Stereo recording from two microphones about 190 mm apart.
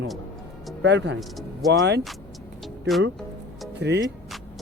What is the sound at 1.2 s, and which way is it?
Speech, centre (ahead or behind).